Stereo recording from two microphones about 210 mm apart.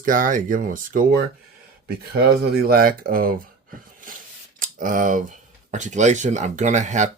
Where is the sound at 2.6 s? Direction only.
45° right (ahead or behind).